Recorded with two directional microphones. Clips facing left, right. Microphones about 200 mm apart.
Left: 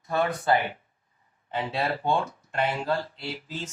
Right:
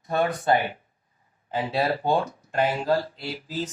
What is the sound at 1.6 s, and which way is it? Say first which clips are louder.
Speech: right 4 dB; 35° right (ahead or behind).